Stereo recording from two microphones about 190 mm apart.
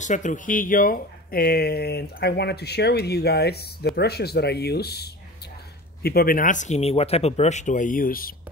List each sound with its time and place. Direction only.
0.0 s speech: 40° left (ahead or behind)